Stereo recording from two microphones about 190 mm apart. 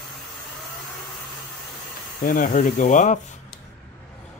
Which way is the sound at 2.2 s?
45° left (ahead or behind).